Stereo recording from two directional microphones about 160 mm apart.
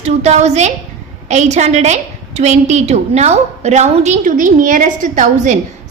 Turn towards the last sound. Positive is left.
turn(degrees=-55)  # may be behind; listen again after turning